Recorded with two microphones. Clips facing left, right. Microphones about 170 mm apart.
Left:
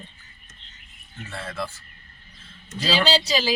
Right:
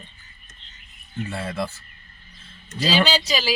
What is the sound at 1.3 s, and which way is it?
Speech, 10° right (ahead or behind).